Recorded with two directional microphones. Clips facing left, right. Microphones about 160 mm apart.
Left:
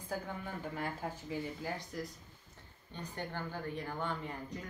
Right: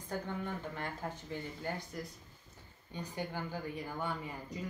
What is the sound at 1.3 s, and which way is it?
A woman's voice, 5° left (ahead or behind).